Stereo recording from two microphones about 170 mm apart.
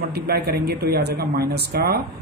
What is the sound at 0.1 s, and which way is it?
A man's voice, 70° right (ahead or behind).